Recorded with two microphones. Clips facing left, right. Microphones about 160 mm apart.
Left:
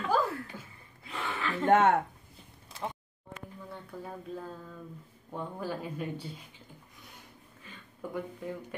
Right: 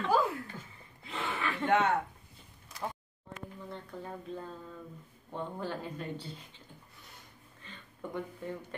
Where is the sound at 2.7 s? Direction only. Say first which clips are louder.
Left 1 dB; 25° left (ahead or behind).